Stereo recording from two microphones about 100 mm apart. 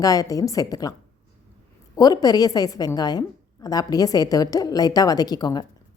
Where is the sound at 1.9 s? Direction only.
40° left (ahead or behind).